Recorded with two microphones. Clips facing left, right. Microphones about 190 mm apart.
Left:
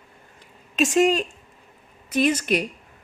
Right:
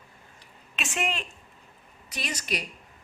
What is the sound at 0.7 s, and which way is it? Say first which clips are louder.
Speech: left 13 dB; 40° left (ahead or behind).